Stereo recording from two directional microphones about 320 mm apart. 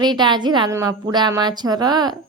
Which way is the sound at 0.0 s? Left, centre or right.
Centre.